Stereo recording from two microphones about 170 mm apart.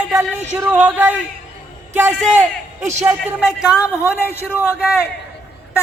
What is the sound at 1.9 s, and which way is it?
A man's voice, 15° right (ahead or behind).